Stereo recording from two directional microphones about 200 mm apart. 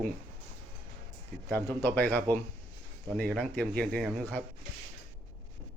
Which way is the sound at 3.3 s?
5° left (ahead or behind).